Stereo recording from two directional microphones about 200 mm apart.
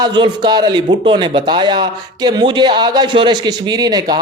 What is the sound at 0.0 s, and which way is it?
Speech, 20° right (ahead or behind).